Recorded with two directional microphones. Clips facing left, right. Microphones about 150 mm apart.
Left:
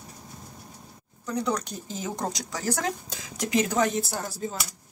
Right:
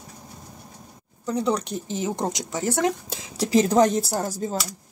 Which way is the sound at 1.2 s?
30° right (ahead or behind).